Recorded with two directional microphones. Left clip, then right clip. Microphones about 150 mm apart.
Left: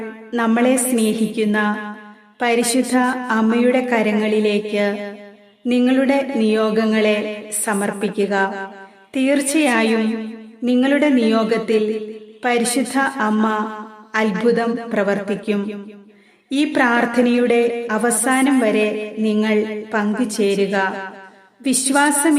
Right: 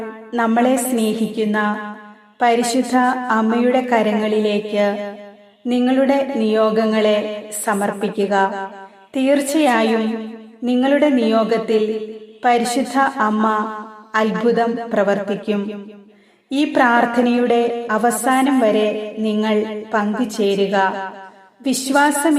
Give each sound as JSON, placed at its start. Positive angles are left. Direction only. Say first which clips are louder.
{"t": 0.0, "sound": "a woman's voice", "louder": "right 1 dB", "side_deg": 20}